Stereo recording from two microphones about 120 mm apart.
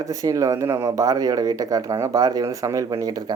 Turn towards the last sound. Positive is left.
turn(degrees=-35)  # may be behind; listen again after turning